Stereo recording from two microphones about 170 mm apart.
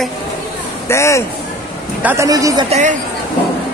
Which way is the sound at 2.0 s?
15° right (ahead or behind).